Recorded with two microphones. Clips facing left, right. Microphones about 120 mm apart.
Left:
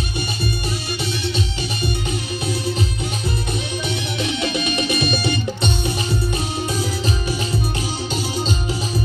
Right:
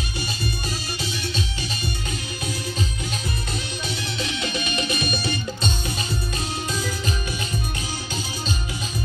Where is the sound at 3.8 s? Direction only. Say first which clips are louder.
Left 5 dB; 20° left (ahead or behind).